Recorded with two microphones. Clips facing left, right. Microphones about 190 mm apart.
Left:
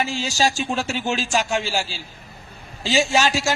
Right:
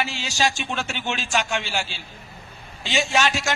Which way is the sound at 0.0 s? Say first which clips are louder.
Left 3 dB; 35° left (ahead or behind).